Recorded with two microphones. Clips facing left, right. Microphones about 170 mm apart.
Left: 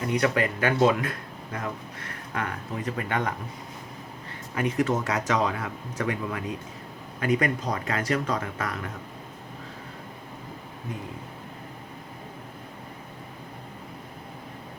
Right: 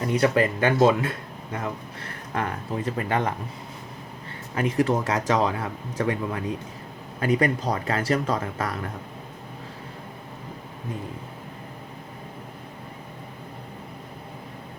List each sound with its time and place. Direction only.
0.2 s speech: 30° right (ahead or behind)
4.5 s speech: 35° right (ahead or behind)